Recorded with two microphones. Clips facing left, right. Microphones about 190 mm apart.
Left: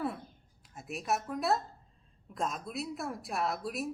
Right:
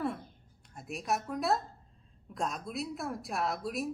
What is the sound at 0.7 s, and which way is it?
Speech, centre (ahead or behind).